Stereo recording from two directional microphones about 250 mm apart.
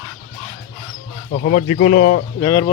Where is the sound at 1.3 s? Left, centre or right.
Left.